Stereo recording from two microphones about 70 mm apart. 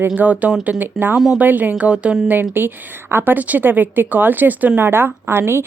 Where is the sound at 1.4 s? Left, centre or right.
Right.